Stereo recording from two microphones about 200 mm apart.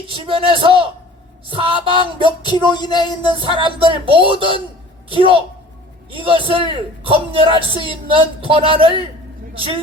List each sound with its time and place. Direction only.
0.1 s a man's voice: 25° right (ahead or behind)
2.4 s music: 20° left (ahead or behind)
3.4 s a man's voice: 25° right (ahead or behind)